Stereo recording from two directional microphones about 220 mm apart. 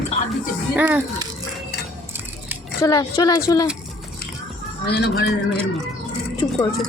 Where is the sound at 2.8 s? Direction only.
15° left (ahead or behind).